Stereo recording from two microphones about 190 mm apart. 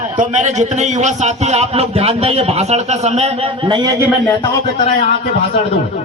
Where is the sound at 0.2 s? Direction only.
40° right (ahead or behind).